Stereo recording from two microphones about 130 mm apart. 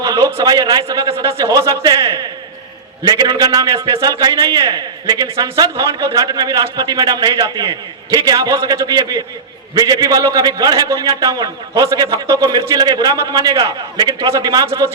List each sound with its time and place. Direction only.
0.0 s a man's voice: 30° right (ahead or behind)